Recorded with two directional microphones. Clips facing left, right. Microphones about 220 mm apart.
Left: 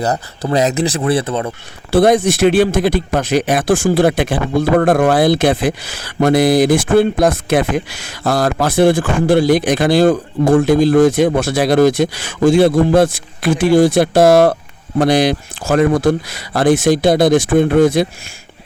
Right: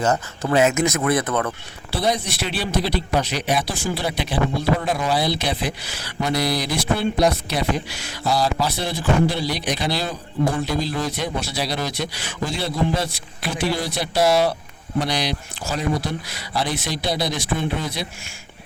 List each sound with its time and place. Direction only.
0.0 s speech: 35° left (ahead or behind)
1.9 s speech: 50° left (ahead or behind)